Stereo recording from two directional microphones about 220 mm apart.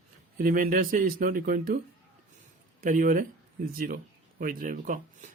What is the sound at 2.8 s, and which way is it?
Speech, 40° right (ahead or behind).